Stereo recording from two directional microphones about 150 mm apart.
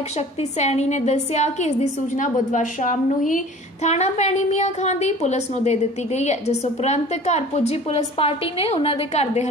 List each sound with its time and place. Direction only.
0.4 s a woman's voice: 50° left (ahead or behind)